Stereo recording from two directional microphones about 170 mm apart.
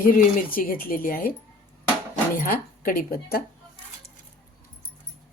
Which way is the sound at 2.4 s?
55° left (ahead or behind).